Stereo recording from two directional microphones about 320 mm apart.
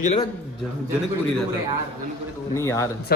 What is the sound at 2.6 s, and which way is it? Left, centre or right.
Speech, centre.